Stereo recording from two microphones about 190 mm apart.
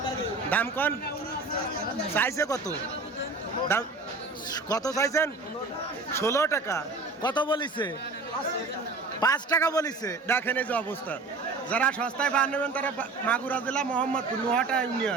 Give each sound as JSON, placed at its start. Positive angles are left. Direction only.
{"t": 0.5, "sound": "a man's voice", "side_deg": 10}
{"t": 2.1, "sound": "a man's voice", "side_deg": 15}
{"t": 4.7, "sound": "a man's voice", "side_deg": 20}
{"t": 9.2, "sound": "a man's voice", "side_deg": 20}